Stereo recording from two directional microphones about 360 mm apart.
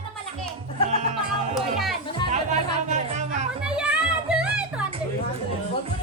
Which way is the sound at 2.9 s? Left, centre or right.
Centre.